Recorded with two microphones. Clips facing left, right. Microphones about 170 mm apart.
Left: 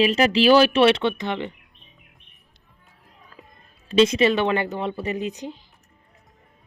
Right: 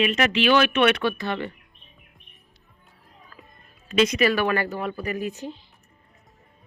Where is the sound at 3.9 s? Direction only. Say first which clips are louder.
Left 3 dB; 30° left (ahead or behind).